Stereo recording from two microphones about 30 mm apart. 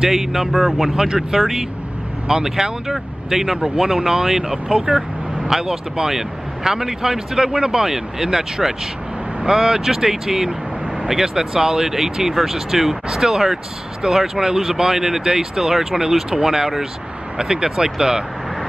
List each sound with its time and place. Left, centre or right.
0.1 s speech: centre
0.9 s speech: right
1.3 s speech: centre
17.4 s speech: right